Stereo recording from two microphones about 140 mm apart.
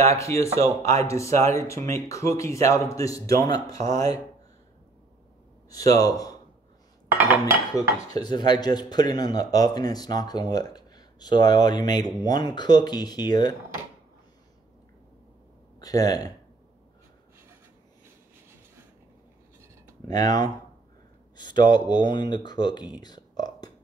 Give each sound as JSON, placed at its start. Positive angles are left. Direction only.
{"t": 0.0, "sound": "speech", "side_deg": 20}
{"t": 5.7, "sound": "speech", "side_deg": 25}
{"t": 7.1, "sound": "dishes", "side_deg": -15}
{"t": 7.7, "sound": "speech", "side_deg": 30}
{"t": 15.8, "sound": "speech", "side_deg": 25}
{"t": 20.1, "sound": "speech", "side_deg": 30}
{"t": 22.9, "sound": "a sound", "side_deg": 30}